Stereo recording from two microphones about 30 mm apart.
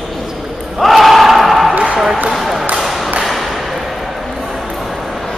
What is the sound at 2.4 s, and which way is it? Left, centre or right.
Basketball bounce, centre.